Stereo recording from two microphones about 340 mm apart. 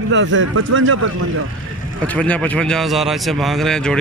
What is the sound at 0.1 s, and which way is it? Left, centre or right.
Speech, right.